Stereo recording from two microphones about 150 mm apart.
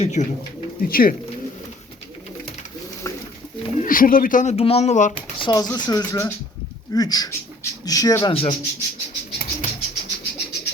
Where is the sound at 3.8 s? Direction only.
65° left (ahead or behind).